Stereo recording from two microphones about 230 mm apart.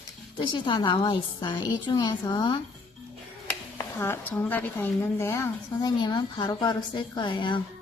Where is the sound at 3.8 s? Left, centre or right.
Centre.